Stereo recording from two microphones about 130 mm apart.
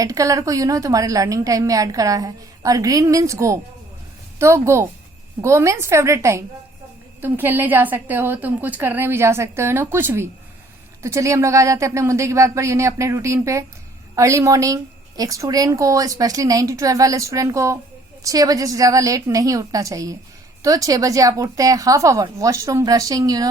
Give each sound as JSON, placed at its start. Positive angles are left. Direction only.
{"t": 0.0, "sound": "a woman's voice", "side_deg": -25}